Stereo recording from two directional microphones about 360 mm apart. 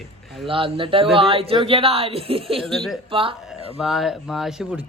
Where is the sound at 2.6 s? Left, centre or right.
Centre.